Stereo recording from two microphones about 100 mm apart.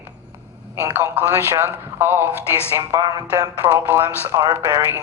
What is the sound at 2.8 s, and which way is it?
Speech, 35° right (ahead or behind).